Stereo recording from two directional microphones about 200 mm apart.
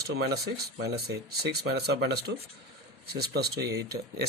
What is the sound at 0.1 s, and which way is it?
Speech, 55° right (ahead or behind).